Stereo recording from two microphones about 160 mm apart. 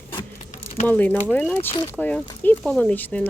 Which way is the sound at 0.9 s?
10° left (ahead or behind).